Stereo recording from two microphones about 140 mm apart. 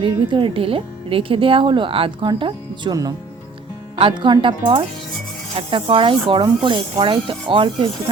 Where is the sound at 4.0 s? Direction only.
35° right (ahead or behind).